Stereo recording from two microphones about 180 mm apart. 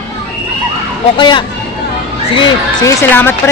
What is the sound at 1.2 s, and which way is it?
A woman's voice, 25° left (ahead or behind).